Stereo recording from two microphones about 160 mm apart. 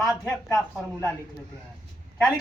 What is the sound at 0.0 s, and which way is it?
Speech, 15° left (ahead or behind).